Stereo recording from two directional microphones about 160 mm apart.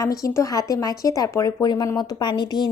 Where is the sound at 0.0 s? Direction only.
20° left (ahead or behind).